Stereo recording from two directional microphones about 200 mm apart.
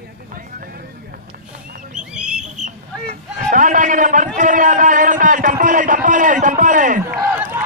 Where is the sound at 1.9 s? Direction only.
5° right (ahead or behind).